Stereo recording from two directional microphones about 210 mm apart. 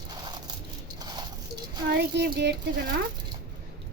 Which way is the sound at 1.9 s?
50° right (ahead or behind).